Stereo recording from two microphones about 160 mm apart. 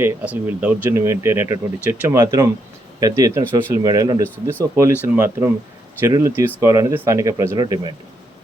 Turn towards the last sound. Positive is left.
turn(degrees=-25)  # may be behind; listen again after turning